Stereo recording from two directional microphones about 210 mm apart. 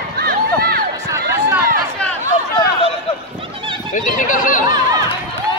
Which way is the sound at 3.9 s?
40° left (ahead or behind).